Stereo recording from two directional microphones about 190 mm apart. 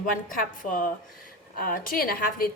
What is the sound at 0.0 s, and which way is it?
A woman's voice, 45° left (ahead or behind).